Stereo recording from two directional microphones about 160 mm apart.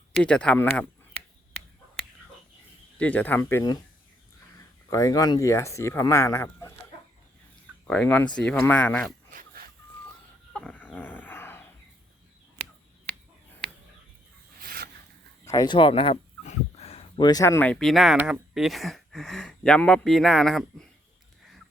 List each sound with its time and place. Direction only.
0.1 s speech: 5° left (ahead or behind)
3.0 s speech: 10° left (ahead or behind)
4.9 s speech: 20° left (ahead or behind)
7.9 s speech: 10° left (ahead or behind)
9.3 s a sound: 60° right (ahead or behind)
10.5 s dog: 5° left (ahead or behind)
14.6 s a sound: 70° right (ahead or behind)
15.4 s speech: 25° left (ahead or behind)
16.5 s a sound: 40° left (ahead or behind)
17.2 s speech: 20° left (ahead or behind); by 20.8 s centre (ahead or behind)